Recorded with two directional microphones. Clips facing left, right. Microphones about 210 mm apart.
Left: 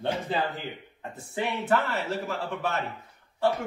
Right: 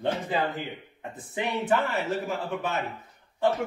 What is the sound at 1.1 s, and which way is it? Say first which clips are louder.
A man's voice: right 1 dB; 15° right (ahead or behind).